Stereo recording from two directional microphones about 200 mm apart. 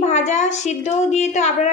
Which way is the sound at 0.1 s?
35° left (ahead or behind).